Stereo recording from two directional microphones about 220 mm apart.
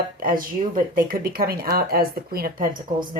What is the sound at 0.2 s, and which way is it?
Speech, 40° right (ahead or behind).